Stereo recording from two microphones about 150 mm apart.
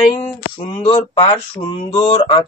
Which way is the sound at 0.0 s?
30° left (ahead or behind).